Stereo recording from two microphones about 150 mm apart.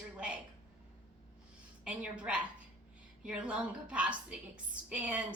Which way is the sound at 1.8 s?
5° right (ahead or behind).